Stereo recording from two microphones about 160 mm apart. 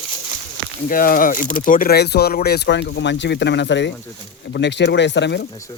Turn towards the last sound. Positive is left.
turn(degrees=90)